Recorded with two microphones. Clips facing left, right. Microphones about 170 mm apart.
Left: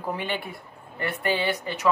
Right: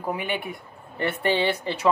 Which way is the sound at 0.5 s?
25° right (ahead or behind).